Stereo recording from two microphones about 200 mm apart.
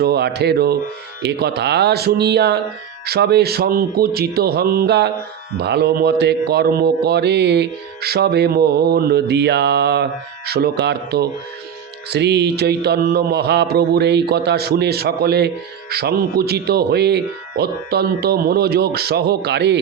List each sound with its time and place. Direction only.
0.0 s speech: 55° right (ahead or behind)
1.2 s mantra: 55° right (ahead or behind)
3.1 s speech: 55° right (ahead or behind)
5.5 s mantra: 55° right (ahead or behind)
15.9 s speech: 50° right (ahead or behind)